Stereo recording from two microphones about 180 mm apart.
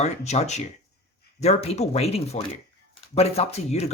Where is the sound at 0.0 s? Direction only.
40° left (ahead or behind).